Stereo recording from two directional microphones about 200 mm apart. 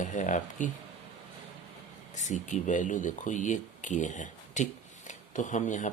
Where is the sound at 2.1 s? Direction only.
35° left (ahead or behind).